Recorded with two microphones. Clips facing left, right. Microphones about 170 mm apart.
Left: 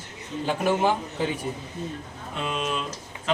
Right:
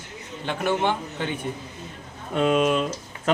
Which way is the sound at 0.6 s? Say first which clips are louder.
Even; 10° left (ahead or behind).